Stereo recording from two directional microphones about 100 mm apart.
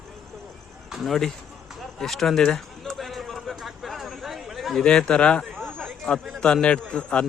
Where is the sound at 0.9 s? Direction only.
Centre (ahead or behind).